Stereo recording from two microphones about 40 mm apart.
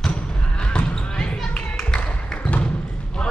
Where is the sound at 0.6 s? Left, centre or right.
Left.